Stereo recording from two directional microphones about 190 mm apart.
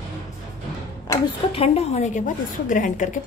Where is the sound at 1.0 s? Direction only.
25° left (ahead or behind).